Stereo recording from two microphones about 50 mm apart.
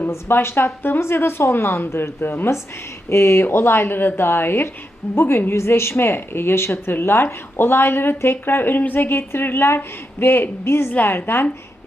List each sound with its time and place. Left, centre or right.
0.3 s speech: left
3.1 s a woman's voice: left
5.5 s a woman's voice: left
10.9 s speech: left